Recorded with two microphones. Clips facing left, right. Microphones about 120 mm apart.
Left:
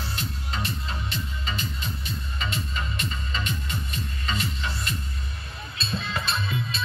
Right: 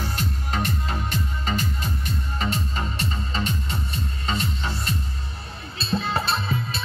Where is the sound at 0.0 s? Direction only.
50° right (ahead or behind).